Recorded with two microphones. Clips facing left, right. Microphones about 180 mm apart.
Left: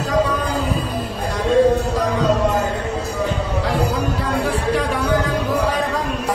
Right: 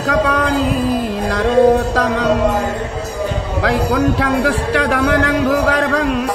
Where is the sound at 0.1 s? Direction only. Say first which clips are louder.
Right 4 dB; 85° right.